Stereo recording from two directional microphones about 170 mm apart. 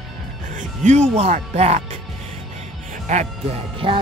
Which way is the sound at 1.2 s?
40° right (ahead or behind).